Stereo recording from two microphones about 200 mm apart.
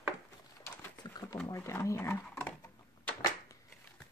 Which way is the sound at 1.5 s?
15° left (ahead or behind).